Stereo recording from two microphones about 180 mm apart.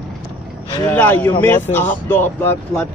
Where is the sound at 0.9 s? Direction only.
10° left (ahead or behind).